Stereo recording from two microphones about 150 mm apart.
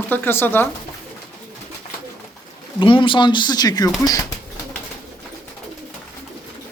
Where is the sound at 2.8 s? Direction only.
35° left (ahead or behind).